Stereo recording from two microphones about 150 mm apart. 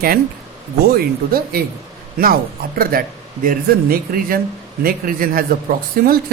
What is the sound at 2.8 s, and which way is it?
Speech, 75° right (ahead or behind).